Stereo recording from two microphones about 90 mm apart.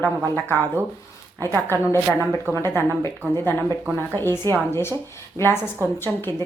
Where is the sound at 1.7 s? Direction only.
30° left (ahead or behind).